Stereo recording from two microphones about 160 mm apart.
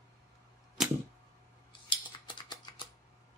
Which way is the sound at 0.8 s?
Centre (ahead or behind).